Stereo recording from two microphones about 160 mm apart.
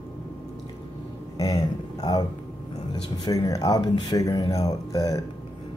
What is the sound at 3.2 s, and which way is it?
Speech, 25° left (ahead or behind).